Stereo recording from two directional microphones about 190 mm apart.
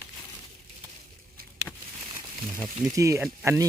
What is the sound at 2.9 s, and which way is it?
Speech, 15° right (ahead or behind).